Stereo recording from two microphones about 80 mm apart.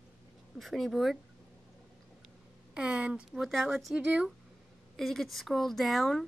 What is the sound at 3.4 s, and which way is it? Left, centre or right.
Speech, centre.